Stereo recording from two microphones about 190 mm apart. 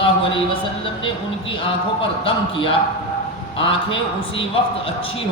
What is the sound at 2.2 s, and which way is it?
A man's voice, 25° left (ahead or behind).